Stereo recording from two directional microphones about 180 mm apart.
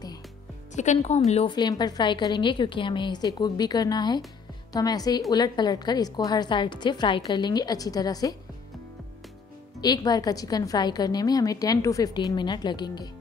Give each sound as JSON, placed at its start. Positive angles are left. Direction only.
{"t": 0.7, "sound": "speech", "side_deg": 40}
{"t": 1.5, "sound": "a woman's voice", "side_deg": 25}
{"t": 9.8, "sound": "a woman's voice", "side_deg": 20}